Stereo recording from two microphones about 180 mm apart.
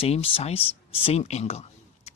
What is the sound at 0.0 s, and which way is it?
Speech, 30° left (ahead or behind).